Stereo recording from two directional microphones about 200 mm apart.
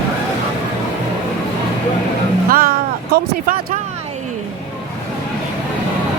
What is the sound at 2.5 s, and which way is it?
Speech, 50° right (ahead or behind).